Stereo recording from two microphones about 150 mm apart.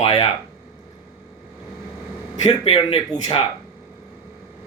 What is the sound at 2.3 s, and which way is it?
Speech, 45° left (ahead or behind).